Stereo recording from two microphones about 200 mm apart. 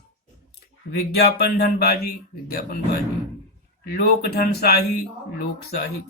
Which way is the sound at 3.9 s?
50° left (ahead or behind).